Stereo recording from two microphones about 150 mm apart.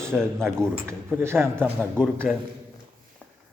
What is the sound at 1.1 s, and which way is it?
Speech, 15° right (ahead or behind).